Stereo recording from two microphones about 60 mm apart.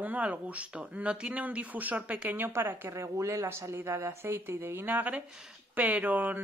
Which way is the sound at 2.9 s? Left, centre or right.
Right.